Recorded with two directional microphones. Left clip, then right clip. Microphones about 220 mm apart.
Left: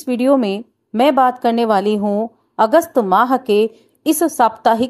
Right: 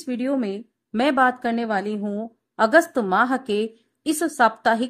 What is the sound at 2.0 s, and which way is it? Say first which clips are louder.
A woman's voice: left 11 dB; 10° left (ahead or behind).